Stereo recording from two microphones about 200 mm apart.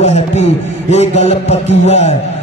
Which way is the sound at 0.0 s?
35° left (ahead or behind).